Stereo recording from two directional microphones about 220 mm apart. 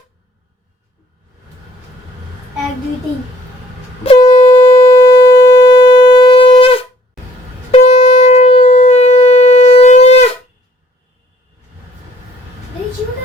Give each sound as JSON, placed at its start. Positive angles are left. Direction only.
{"t": 4.0, "sound": "a sound", "side_deg": 25}
{"t": 4.9, "sound": "shofar", "side_deg": 20}
{"t": 7.9, "sound": "shofar", "side_deg": 25}